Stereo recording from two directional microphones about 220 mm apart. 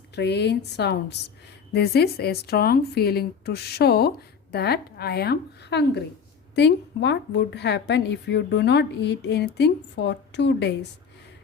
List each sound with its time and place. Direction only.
0.2 s speech: 50° left (ahead or behind)